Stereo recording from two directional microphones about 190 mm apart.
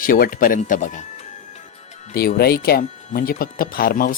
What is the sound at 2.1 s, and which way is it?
Speech, 55° left (ahead or behind).